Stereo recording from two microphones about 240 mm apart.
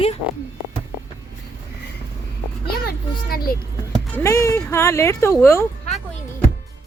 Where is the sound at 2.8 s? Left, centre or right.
Left.